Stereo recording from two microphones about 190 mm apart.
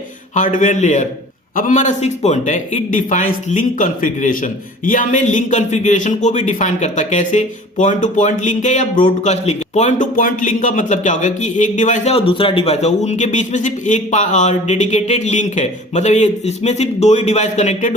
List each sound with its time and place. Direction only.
0.3 s a man's voice: 40° left (ahead or behind)